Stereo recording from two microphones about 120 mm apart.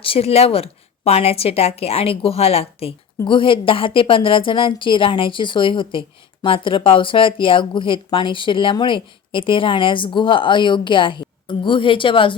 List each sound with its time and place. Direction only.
0.0 s a woman's voice: 55° left (ahead or behind)
3.2 s a woman's voice: 45° left (ahead or behind)